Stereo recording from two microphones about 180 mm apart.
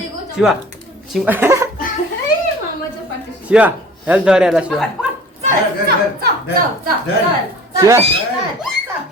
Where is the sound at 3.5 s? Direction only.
10° right (ahead or behind).